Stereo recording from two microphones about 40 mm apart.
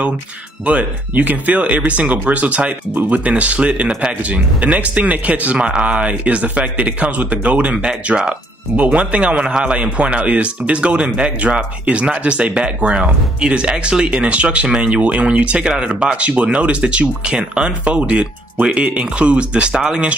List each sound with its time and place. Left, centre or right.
1.1 s speech: right
7.8 s speech: right
8.7 s speech: right
9.8 s speech: right
16.2 s speech: right